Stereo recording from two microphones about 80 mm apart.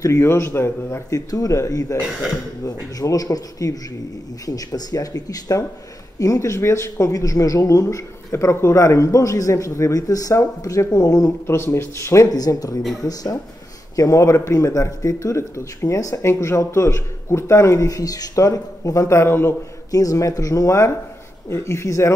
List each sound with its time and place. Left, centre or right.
0.0 s speech: left
1.3 s speech: left
11.4 s speech: left
12.3 s speech: left
19.9 s speech: left